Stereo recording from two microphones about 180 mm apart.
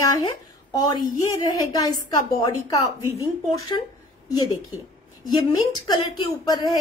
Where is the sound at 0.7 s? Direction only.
25° left (ahead or behind).